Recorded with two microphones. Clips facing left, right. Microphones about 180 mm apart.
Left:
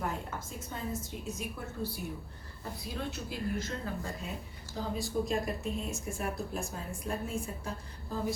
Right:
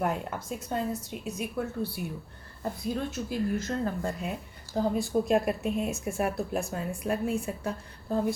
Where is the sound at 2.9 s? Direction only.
50° right (ahead or behind).